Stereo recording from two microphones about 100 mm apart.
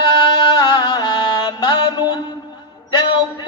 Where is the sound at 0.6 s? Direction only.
50° left (ahead or behind).